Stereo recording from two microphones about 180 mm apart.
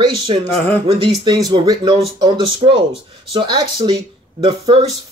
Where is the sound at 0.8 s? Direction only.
25° right (ahead or behind).